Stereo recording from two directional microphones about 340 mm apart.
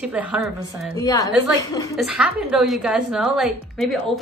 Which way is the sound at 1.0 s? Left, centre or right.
Centre.